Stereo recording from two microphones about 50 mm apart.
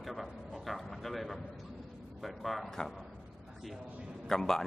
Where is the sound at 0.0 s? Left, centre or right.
Centre.